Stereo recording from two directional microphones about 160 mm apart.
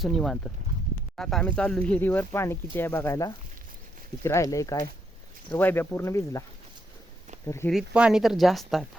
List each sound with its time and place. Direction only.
0.0 s speech: centre (ahead or behind); by 6.4 s 20° left (ahead or behind)
7.4 s speech: 15° left (ahead or behind)
7.7 s speech: 5° right (ahead or behind)